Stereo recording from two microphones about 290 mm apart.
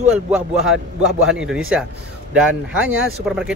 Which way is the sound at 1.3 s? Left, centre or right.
Centre.